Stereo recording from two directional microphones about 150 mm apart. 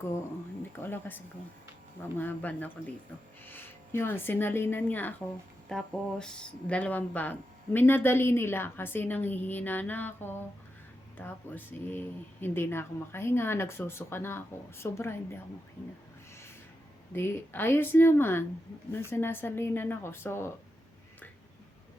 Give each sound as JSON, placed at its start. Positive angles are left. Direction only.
{"t": 0.8, "sound": "speech", "side_deg": 15}
{"t": 17.2, "sound": "speech", "side_deg": 15}